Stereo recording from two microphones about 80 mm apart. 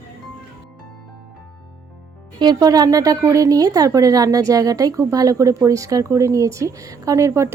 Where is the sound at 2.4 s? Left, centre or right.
Right.